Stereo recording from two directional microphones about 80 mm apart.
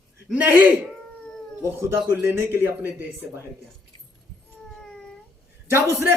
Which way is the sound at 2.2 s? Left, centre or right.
Right.